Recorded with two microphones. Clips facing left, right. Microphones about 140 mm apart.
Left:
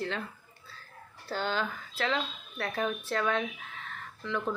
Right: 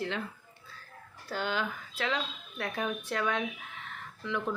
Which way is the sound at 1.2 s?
30° left (ahead or behind).